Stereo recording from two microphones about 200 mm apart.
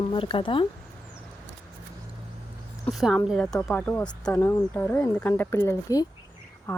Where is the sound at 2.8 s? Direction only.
Centre (ahead or behind).